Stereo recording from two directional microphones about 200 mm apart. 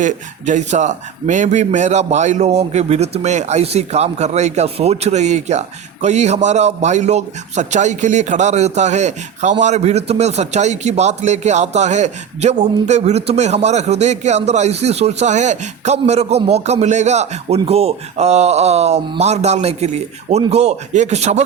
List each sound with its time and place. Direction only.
0.0 s a man's voice: 35° right (ahead or behind)